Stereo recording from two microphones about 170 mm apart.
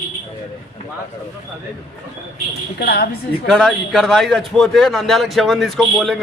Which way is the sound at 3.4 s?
Centre (ahead or behind).